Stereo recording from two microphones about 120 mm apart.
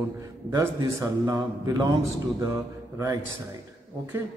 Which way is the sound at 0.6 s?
30° right (ahead or behind).